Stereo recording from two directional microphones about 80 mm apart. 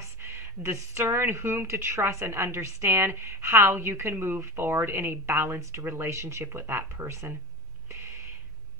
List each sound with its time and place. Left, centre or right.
0.2 s speech: right